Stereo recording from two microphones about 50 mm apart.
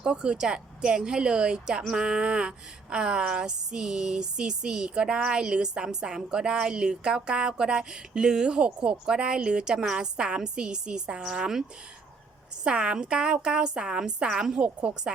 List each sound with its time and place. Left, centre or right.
0.0 s speech: centre
12.6 s speech: centre